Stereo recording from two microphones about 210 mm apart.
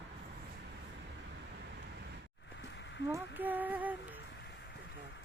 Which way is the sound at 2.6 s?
55° left (ahead or behind).